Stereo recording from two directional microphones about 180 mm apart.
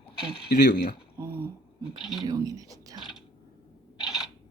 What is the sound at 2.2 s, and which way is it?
Speech, 20° right (ahead or behind).